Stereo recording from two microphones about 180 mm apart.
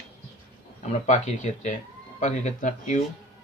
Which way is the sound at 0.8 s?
35° left (ahead or behind).